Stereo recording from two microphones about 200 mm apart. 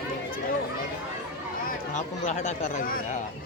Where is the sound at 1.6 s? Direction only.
40° left (ahead or behind).